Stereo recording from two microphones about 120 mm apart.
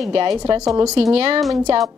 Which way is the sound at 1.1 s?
55° right (ahead or behind).